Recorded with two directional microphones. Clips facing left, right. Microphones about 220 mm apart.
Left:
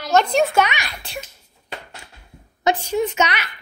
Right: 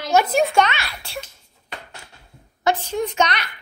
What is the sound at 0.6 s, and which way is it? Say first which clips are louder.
Speech: even; 15° left (ahead or behind).